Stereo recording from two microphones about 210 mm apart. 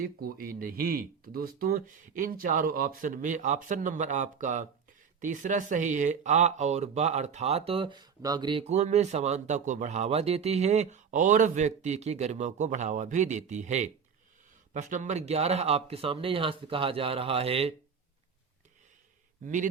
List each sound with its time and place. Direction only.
0.0 s speech: 45° right (ahead or behind); by 17.7 s 30° right (ahead or behind)